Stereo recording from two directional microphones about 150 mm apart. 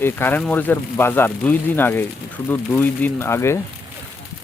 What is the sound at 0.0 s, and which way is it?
Speech, 15° left (ahead or behind).